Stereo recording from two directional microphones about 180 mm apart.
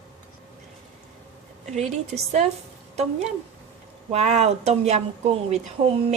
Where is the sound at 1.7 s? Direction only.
40° right (ahead or behind).